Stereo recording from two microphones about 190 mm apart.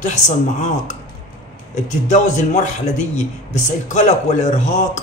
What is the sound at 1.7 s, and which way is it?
Speech, 40° left (ahead or behind).